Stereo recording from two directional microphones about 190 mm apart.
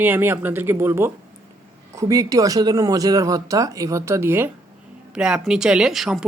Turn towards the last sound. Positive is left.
turn(degrees=0)  # may be behind; listen again after turning